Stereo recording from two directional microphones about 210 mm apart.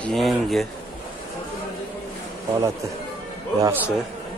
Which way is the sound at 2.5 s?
15° right (ahead or behind).